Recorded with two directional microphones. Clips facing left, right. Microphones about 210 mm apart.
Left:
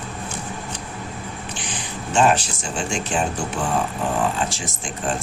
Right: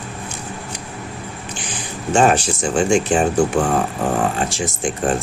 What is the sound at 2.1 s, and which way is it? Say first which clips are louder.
Speech: right 3 dB; 50° right (ahead or behind).